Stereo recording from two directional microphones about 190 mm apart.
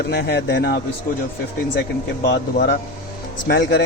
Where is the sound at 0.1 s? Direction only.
60° left (ahead or behind).